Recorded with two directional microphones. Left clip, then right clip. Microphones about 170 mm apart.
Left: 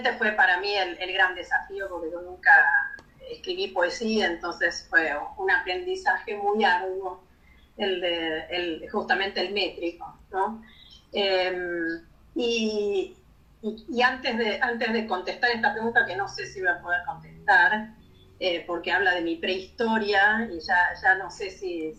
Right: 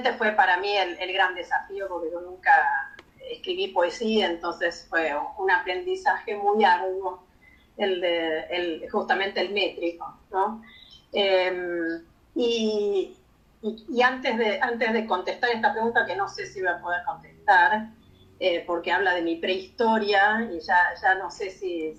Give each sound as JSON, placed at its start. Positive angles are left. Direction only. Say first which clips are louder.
{"t": 0.0, "sound": "speech", "louder": "right 1 dB", "side_deg": 15}
{"t": 11.1, "sound": "speech", "louder": "right 2 dB", "side_deg": 20}